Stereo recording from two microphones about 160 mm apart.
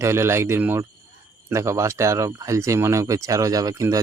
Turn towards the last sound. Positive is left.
turn(degrees=-20)  # may be behind; listen again after turning